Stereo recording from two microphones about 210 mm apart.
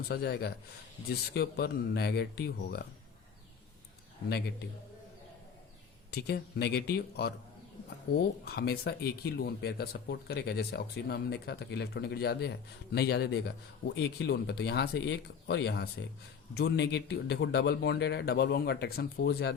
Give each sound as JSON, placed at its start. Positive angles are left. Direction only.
{"t": 0.1, "sound": "speech", "side_deg": 50}
{"t": 6.1, "sound": "speech", "side_deg": 50}